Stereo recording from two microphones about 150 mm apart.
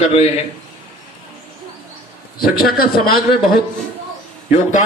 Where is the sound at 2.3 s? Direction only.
80° left.